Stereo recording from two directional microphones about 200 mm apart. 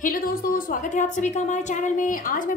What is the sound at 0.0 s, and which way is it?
A woman's voice, 45° left (ahead or behind).